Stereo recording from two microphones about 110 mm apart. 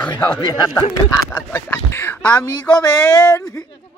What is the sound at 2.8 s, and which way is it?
Speech, 30° left (ahead or behind).